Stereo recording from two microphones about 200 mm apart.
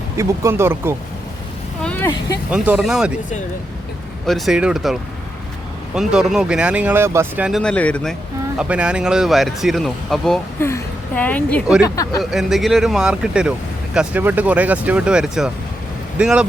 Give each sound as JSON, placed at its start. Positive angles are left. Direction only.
{"t": 0.2, "sound": "speech", "side_deg": -15}
{"t": 1.8, "sound": "speech", "side_deg": 10}
{"t": 2.5, "sound": "speech", "side_deg": -5}
{"t": 4.3, "sound": "speech", "side_deg": 0}
{"t": 8.5, "sound": "speech", "side_deg": -5}
{"t": 10.7, "sound": "a sound", "side_deg": 10}
{"t": 11.8, "sound": "speech", "side_deg": 15}
{"t": 12.2, "sound": "speech", "side_deg": 0}